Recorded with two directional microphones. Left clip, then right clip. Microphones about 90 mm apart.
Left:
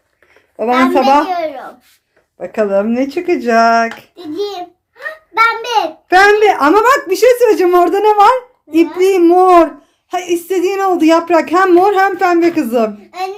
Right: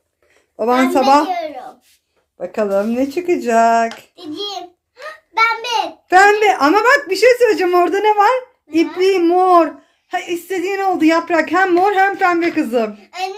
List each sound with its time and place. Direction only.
0.9 s a child's voice: 45° right (ahead or behind)
2.4 s speech: 25° right (ahead or behind)
3.8 s child singing: 5° right (ahead or behind)
4.9 s a sound: centre (ahead or behind)
6.2 s speech: 20° right (ahead or behind)
6.6 s speech: 5° left (ahead or behind)